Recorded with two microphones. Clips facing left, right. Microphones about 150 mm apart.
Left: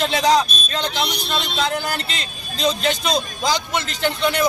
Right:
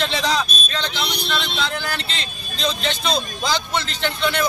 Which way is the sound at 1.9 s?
45° left (ahead or behind).